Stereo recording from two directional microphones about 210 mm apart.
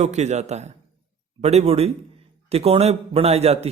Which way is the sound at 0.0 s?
30° right (ahead or behind).